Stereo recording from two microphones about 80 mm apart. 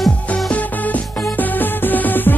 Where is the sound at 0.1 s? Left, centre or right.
Centre.